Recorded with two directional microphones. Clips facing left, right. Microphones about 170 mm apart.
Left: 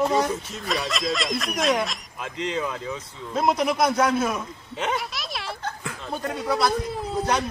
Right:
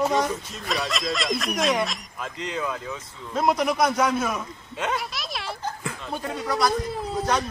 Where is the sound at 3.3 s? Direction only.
Centre (ahead or behind).